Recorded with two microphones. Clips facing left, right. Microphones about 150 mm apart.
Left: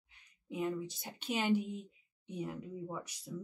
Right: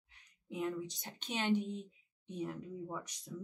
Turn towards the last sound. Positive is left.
turn(degrees=5)  # may be behind; listen again after turning